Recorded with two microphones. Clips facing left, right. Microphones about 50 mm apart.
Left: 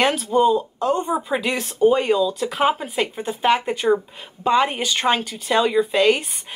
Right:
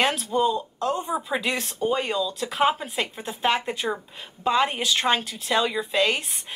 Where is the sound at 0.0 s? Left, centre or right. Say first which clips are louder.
Left 5 dB; centre.